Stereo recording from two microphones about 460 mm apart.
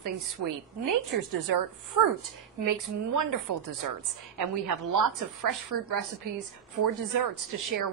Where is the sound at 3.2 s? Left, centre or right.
Right.